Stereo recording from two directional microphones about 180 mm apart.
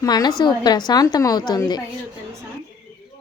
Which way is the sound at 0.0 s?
20° left (ahead or behind).